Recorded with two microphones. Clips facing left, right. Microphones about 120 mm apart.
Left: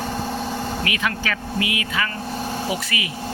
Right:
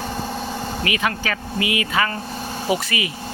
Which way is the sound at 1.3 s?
30° right (ahead or behind).